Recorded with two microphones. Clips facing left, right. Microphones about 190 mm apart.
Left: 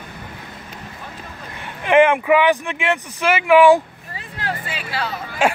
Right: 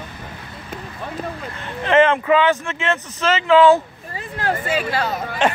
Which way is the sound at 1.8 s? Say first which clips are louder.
Left 1 dB; 15° left (ahead or behind).